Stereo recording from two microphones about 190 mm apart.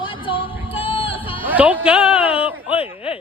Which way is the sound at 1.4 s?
10° right (ahead or behind).